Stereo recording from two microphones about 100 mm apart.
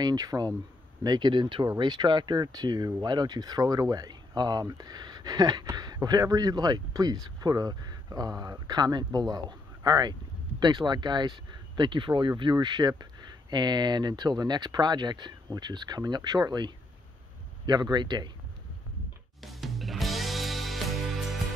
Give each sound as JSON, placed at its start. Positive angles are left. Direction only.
{"t": 0.0, "sound": "speech", "side_deg": -40}
{"t": 19.4, "sound": "music", "side_deg": 0}